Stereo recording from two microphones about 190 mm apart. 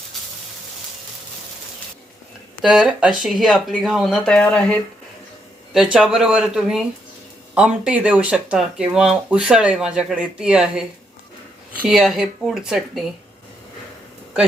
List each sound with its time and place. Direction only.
2.6 s speech: 5° right (ahead or behind)